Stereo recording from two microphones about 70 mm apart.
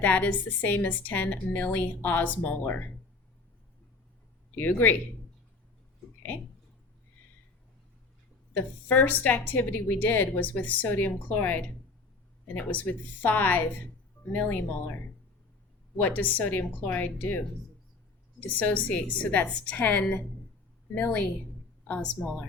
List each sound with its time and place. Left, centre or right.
0.0 s a woman's voice: left
8.5 s a woman's voice: left
16.0 s a woman's voice: left